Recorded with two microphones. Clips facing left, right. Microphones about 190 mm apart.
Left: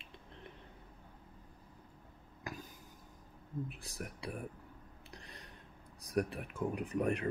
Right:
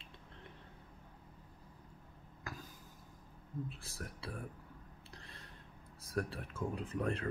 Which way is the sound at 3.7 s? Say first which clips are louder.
Left 2 dB; 20° left (ahead or behind).